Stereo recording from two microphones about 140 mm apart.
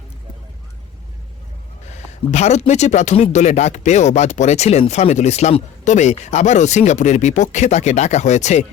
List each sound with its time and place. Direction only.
1.9 s speech: 55° left (ahead or behind)